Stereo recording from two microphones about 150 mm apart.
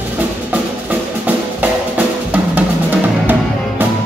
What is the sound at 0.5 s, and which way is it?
Music, 10° right (ahead or behind).